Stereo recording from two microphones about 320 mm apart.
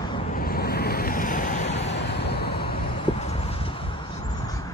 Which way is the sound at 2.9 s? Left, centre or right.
Centre.